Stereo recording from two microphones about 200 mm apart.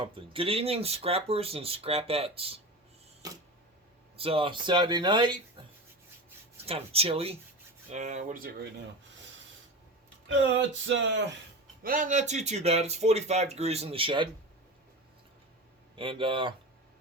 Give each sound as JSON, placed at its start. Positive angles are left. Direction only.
{"t": 0.0, "sound": "speech", "side_deg": -25}
{"t": 4.2, "sound": "speech", "side_deg": -25}
{"t": 6.7, "sound": "speech", "side_deg": -30}
{"t": 10.8, "sound": "speech", "side_deg": -65}
{"t": 11.8, "sound": "speech", "side_deg": -45}
{"t": 16.0, "sound": "speech", "side_deg": -25}